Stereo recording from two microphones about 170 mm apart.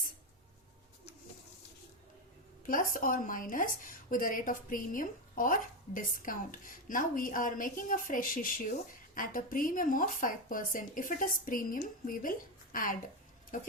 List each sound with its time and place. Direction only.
2.6 s a woman's voice: 55° left (ahead or behind)